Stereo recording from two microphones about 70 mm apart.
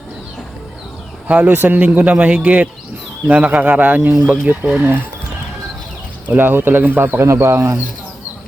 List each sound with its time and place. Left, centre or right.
1.3 s speech: right
6.3 s speech: right
7.3 s speech: right